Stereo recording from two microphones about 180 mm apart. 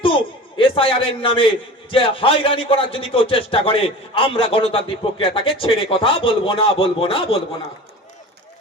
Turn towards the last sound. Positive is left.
turn(degrees=30)  # may be behind; listen again after turning